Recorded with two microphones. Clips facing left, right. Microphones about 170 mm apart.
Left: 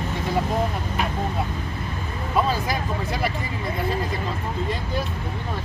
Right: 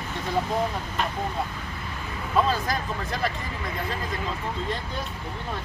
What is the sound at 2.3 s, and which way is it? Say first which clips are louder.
Vehicle: left 1 dB; 5° left (ahead or behind).